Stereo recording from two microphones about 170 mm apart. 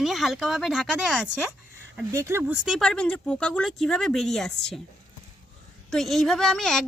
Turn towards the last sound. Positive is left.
turn(degrees=0)  # may be behind; listen again after turning